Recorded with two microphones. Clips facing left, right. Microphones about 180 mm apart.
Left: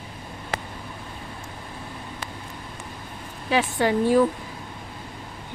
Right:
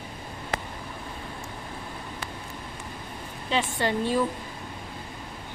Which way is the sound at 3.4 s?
10° left (ahead or behind).